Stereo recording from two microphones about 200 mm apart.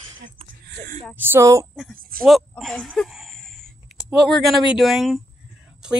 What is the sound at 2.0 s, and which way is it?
Speech, 45° right (ahead or behind).